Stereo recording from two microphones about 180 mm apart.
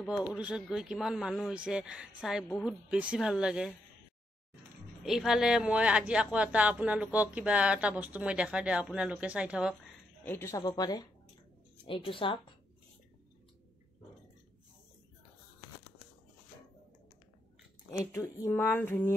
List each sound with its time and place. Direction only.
0.3 s speech: 5° right (ahead or behind)
5.0 s speech: centre (ahead or behind)
10.2 s a woman's voice: 15° left (ahead or behind); by 12.4 s 30° left (ahead or behind)
18.4 s a sound: 15° left (ahead or behind)